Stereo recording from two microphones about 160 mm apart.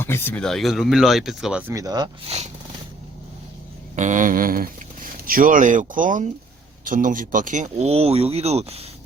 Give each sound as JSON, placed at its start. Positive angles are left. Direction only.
{"t": 0.0, "sound": "speech", "side_deg": 15}
{"t": 1.7, "sound": "speech", "side_deg": -25}
{"t": 2.3, "sound": "speech", "side_deg": -40}
{"t": 3.9, "sound": "speech", "side_deg": -50}